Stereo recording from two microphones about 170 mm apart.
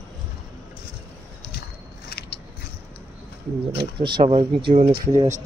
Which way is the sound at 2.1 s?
70° left (ahead or behind).